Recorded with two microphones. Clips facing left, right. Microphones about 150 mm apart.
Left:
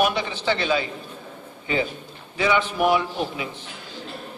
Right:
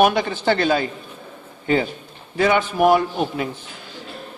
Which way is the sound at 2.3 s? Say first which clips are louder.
Right 4 dB; 50° right (ahead or behind).